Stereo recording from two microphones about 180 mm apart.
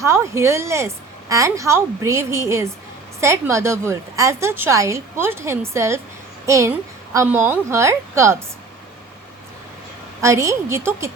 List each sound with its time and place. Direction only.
0.0 s a woman's voice: 15° right (ahead or behind)
10.2 s a woman's voice: 15° right (ahead or behind)